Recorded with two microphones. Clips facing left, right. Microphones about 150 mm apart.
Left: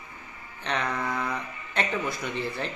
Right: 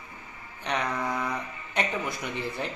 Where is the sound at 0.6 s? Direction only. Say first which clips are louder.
Even; 15° right (ahead or behind).